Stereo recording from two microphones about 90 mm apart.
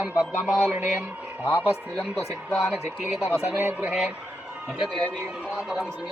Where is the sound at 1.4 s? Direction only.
20° left (ahead or behind).